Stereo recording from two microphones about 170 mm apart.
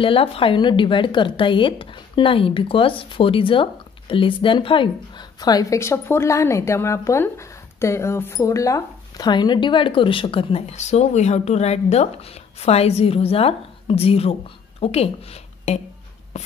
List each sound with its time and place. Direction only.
0.0 s speech: 35° left (ahead or behind)
16.3 s writing: 40° left (ahead or behind)